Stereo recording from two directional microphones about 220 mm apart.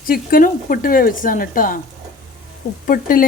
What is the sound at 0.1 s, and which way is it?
Speech, 40° left (ahead or behind).